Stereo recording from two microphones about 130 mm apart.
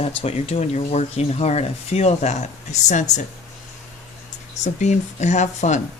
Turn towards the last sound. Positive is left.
turn(degrees=65)  # may be behind; listen again after turning